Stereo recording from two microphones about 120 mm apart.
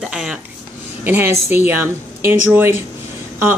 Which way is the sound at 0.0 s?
5° right (ahead or behind).